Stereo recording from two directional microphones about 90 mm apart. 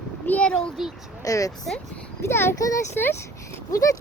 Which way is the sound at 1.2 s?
40° left (ahead or behind).